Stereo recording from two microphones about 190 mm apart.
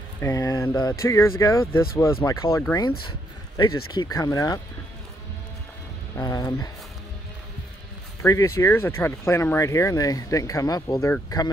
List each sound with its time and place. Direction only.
0.2 s speech: 15° left (ahead or behind)
6.1 s speech: 15° left (ahead or behind)
8.2 s speech: 15° left (ahead or behind)